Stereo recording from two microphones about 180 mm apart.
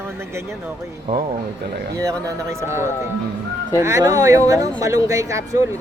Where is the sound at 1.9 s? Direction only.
15° right (ahead or behind).